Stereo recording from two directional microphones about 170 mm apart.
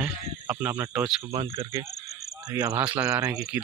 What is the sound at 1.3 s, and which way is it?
Speech, 30° right (ahead or behind).